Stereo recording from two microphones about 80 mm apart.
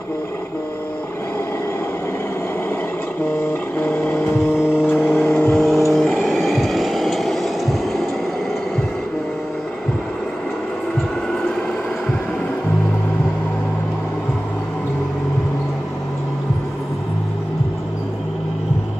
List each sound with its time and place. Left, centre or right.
3.3 s a sound: left
4.8 s vehicle: left
5.6 s vehicle: centre